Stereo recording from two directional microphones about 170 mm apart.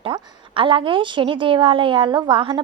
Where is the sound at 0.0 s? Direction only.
30° right (ahead or behind).